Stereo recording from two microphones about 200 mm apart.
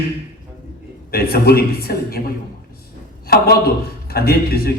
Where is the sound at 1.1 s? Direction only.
50° left (ahead or behind).